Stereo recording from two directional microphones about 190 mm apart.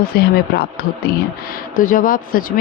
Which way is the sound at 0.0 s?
55° left (ahead or behind).